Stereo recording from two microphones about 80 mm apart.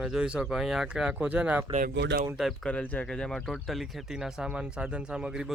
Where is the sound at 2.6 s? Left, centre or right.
Centre.